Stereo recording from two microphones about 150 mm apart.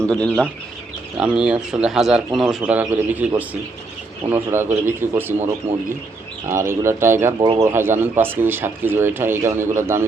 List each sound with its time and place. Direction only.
0.0 s speech: 5° left (ahead or behind)
1.2 s speech: 5° right (ahead or behind)
6.5 s speech: 15° right (ahead or behind)